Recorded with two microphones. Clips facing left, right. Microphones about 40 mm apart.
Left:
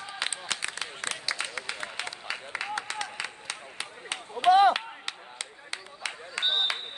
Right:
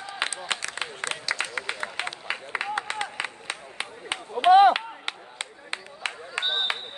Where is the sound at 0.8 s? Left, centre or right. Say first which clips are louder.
Right 4 dB; right.